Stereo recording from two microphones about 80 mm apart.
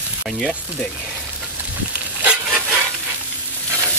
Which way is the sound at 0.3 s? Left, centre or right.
Centre.